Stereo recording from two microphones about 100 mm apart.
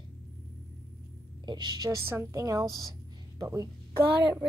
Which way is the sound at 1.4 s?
45° right (ahead or behind).